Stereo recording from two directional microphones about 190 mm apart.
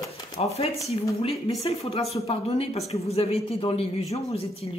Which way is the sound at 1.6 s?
30° left (ahead or behind).